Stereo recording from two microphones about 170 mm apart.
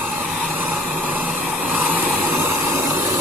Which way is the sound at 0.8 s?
10° right (ahead or behind).